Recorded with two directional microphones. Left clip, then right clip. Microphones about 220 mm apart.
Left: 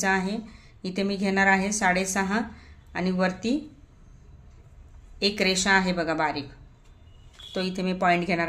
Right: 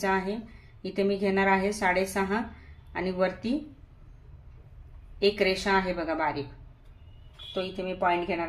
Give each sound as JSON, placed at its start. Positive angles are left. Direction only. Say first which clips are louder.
{"t": 0.0, "sound": "a woman's voice", "louder": "left 2 dB", "side_deg": 35}
{"t": 5.2, "sound": "a woman's voice", "louder": "left 1 dB", "side_deg": 35}
{"t": 7.5, "sound": "speech", "louder": "left 3 dB", "side_deg": 45}